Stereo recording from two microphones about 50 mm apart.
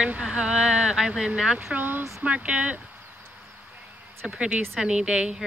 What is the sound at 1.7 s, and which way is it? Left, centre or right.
Speech, right.